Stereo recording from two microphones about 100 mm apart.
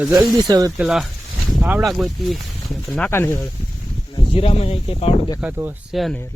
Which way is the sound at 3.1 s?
25° left (ahead or behind).